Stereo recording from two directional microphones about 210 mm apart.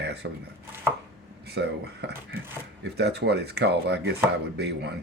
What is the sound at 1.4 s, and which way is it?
Speech, 50° right (ahead or behind).